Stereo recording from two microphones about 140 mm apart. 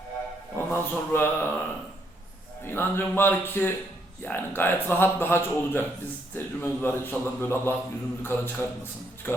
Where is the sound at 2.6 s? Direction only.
15° left (ahead or behind).